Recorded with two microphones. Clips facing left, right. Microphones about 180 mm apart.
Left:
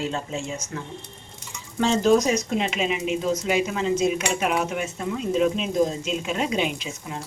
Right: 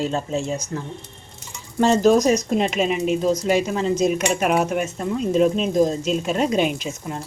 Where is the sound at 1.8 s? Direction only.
45° right (ahead or behind).